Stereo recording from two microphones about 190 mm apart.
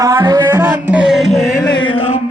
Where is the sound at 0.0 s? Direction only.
20° right (ahead or behind); by 1.7 s 5° left (ahead or behind).